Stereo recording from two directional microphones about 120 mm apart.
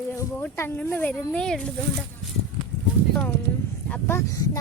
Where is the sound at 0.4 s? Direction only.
20° left (ahead or behind).